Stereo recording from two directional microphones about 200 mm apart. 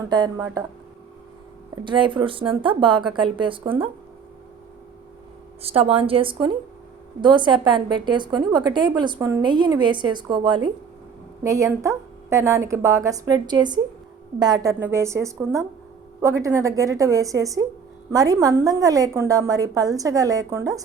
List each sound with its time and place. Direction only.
0.1 s a woman's voice: 20° right (ahead or behind)
1.8 s a woman's voice: 25° right (ahead or behind)
5.6 s a woman's voice: 30° right (ahead or behind)